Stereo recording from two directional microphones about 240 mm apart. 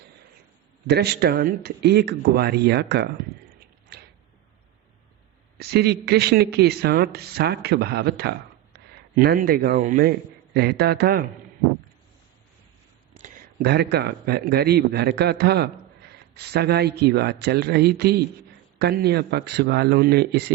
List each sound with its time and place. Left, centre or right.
0.9 s a man's voice: right
3.9 s a sound: right
5.5 s speech: right
13.1 s a man's voice: right